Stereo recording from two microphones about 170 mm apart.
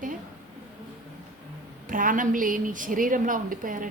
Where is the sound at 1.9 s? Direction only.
55° right (ahead or behind).